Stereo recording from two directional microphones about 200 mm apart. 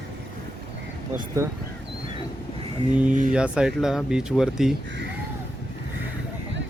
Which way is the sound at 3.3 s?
5° right (ahead or behind).